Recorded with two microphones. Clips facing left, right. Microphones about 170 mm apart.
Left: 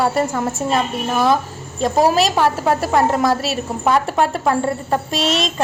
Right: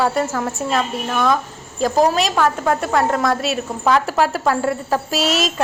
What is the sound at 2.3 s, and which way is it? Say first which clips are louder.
Speech: left 1 dB; 10° left (ahead or behind).